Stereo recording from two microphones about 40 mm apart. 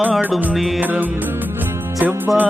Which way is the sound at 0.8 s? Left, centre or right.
Right.